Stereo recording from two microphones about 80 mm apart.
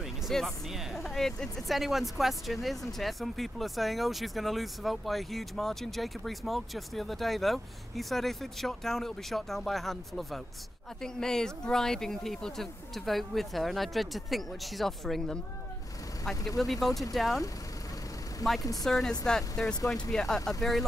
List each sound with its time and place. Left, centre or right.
0.0 s speech: centre
18.6 s speech: left
18.9 s speech: centre